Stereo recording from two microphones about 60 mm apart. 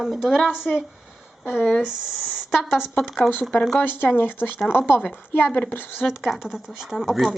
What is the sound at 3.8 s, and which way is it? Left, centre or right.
Speech, left.